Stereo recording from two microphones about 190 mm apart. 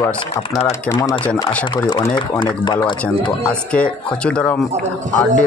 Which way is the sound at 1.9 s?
25° left (ahead or behind).